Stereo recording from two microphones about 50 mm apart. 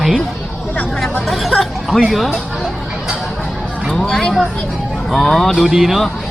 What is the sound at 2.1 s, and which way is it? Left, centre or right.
Speech, centre.